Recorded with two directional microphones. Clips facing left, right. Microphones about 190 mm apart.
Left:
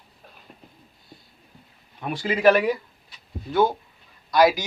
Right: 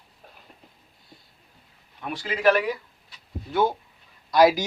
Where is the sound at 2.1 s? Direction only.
15° left (ahead or behind).